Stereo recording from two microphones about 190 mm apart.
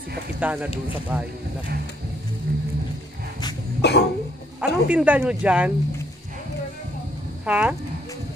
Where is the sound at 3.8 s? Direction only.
60° left (ahead or behind).